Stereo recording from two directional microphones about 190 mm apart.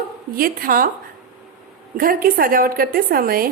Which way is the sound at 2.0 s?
50° right (ahead or behind).